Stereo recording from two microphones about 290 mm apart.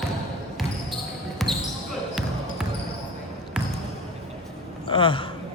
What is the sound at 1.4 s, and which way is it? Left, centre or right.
Basketball bounce, centre.